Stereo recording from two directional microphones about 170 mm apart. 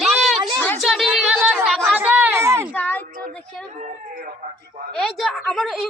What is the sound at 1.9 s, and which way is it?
Speech, 10° right (ahead or behind).